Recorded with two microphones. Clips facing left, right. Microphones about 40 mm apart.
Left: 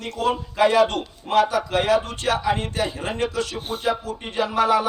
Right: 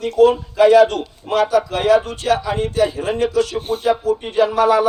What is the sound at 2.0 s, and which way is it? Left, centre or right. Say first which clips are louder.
Speech: right 3 dB; left.